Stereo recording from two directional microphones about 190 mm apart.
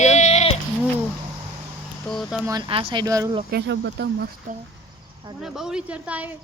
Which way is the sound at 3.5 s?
65° right (ahead or behind).